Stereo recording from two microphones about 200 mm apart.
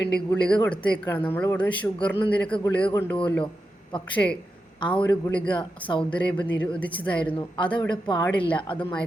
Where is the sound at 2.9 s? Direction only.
20° left (ahead or behind).